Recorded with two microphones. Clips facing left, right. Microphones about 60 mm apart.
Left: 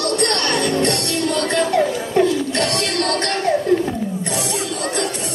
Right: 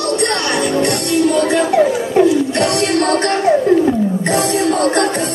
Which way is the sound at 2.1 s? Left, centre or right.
Centre.